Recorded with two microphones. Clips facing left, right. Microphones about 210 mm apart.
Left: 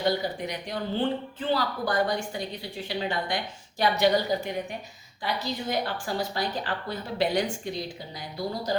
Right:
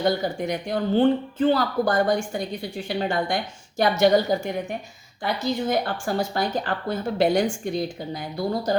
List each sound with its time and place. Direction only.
0.0 s speech: 50° right (ahead or behind)